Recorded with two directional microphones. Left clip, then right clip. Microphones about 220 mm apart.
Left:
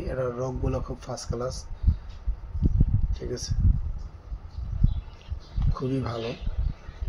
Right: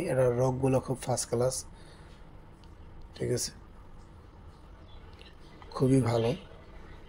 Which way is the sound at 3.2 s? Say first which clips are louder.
Right 3 dB; 30° right (ahead or behind).